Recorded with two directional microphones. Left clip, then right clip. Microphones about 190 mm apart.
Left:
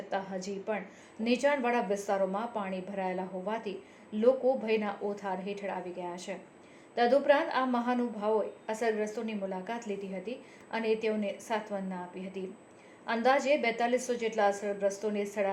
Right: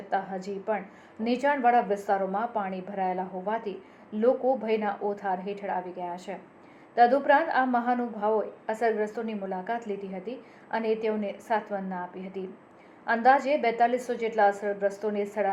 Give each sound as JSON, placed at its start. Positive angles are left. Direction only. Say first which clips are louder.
{"t": 0.4, "sound": "a woman's voice", "louder": "right 5 dB", "side_deg": 25}
{"t": 13.1, "sound": "a woman's voice", "louder": "right 5 dB", "side_deg": 25}